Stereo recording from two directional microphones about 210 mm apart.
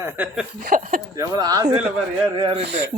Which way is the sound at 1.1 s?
20° right (ahead or behind).